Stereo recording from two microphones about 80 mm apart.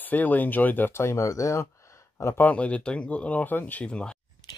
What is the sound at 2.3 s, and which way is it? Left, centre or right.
Speech, centre.